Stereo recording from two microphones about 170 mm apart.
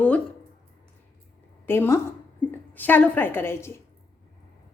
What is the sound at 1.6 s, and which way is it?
A woman's voice, 15° left (ahead or behind).